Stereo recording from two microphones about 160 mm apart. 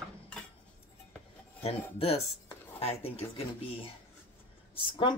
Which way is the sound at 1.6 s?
40° left (ahead or behind).